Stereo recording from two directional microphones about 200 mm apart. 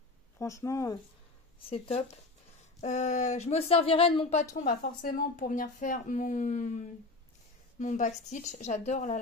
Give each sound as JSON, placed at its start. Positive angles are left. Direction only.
{"t": 0.4, "sound": "speech", "side_deg": 15}
{"t": 1.7, "sound": "speech", "side_deg": 30}
{"t": 4.6, "sound": "speech", "side_deg": 45}